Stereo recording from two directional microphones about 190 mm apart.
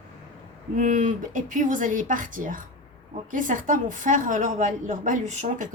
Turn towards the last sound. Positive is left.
turn(degrees=-40)  # may be behind; listen again after turning